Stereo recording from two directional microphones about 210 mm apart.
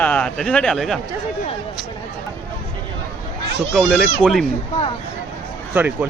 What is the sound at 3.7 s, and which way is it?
Speech, centre (ahead or behind).